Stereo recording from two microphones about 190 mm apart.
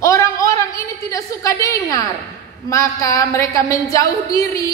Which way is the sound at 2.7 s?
15° left (ahead or behind).